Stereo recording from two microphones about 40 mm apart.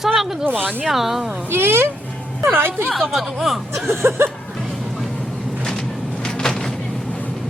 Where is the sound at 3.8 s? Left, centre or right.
Right.